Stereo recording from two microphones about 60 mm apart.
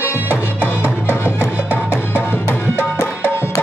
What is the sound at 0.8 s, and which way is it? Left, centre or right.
Music, left.